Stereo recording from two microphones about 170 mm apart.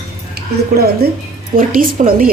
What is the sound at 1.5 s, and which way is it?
Speech, 55° right (ahead or behind).